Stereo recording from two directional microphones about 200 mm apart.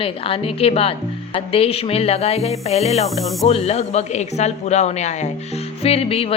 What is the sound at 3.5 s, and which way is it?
Speech, 30° left (ahead or behind).